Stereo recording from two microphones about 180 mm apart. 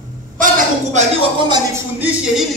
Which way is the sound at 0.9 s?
30° right (ahead or behind).